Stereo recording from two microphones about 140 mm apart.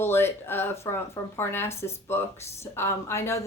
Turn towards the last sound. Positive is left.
turn(degrees=20)  # may be behind; listen again after turning